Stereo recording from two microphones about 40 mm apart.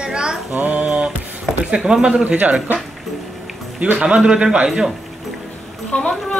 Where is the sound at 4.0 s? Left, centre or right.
Right.